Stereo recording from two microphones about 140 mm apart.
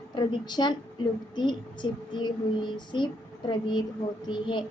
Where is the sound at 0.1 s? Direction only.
30° left (ahead or behind).